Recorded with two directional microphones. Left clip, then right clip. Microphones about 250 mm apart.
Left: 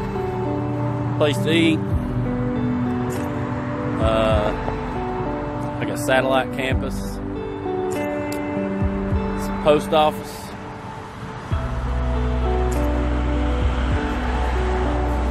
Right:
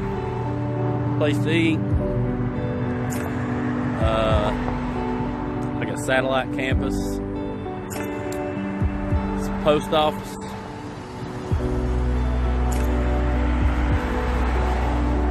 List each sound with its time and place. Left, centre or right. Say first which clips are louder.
1.2 s speech: left 4 dB; centre
4.0 s speech: left 3 dB; centre
6.0 s speech: left 3 dB; centre
9.7 s speech: left 3 dB; centre